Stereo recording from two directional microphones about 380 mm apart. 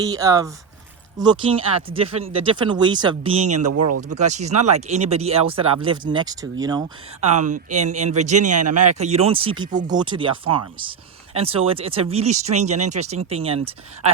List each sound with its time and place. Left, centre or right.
0.0 s speech: centre
3.5 s speech: right
4.1 s speech: centre
8.4 s speech: right
9.0 s speech: centre